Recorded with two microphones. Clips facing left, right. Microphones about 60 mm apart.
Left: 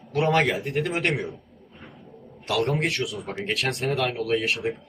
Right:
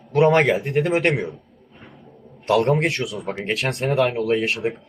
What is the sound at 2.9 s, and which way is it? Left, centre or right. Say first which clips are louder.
A man's voice: right 3 dB; centre.